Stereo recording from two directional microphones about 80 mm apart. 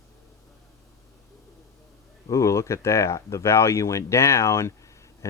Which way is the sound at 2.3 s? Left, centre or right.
Left.